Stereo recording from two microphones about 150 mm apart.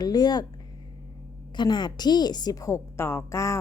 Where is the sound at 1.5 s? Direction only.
30° left (ahead or behind).